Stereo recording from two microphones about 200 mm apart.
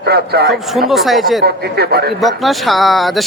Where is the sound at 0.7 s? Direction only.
Centre (ahead or behind).